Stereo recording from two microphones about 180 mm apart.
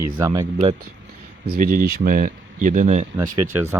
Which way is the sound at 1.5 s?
55° right (ahead or behind).